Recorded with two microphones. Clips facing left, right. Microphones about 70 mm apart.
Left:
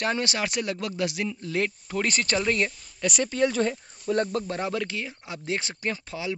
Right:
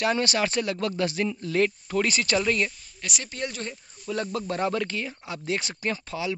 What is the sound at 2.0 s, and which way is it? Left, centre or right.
Speech, left.